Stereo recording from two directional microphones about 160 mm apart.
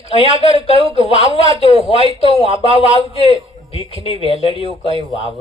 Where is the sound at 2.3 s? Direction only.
35° right (ahead or behind).